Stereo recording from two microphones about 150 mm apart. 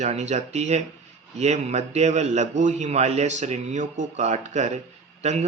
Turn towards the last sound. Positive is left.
turn(degrees=-50)  # may be behind; listen again after turning